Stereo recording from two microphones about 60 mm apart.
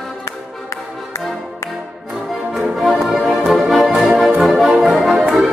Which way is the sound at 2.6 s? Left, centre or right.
Centre.